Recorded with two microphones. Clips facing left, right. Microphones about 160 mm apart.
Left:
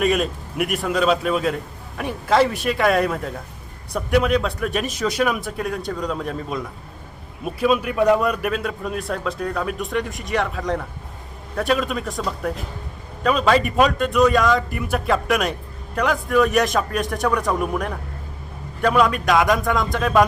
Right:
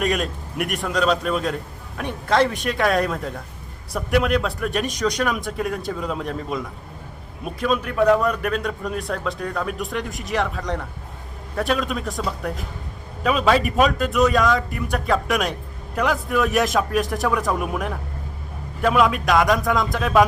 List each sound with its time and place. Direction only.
0.0 s a man's voice: centre (ahead or behind)